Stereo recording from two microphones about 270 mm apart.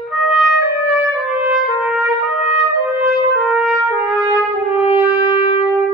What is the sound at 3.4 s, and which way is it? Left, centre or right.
Trumpet, centre.